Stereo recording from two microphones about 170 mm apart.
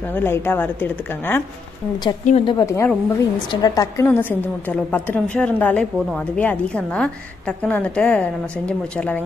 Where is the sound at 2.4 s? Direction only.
20° left (ahead or behind).